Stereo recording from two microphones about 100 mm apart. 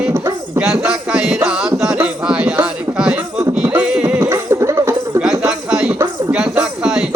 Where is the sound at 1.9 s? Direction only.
10° right (ahead or behind).